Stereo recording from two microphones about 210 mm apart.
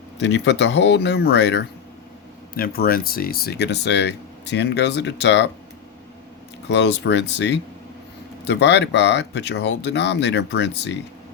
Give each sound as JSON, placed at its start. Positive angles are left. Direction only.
{"t": 0.2, "sound": "speech", "side_deg": 55}
{"t": 6.7, "sound": "speech", "side_deg": 55}